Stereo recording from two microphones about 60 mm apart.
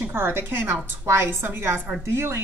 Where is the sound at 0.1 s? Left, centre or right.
Right.